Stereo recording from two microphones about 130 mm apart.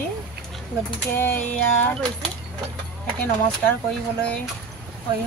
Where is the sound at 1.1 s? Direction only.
15° left (ahead or behind).